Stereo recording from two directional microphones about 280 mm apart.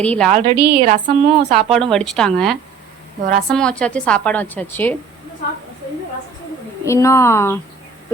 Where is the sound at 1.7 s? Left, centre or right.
Centre.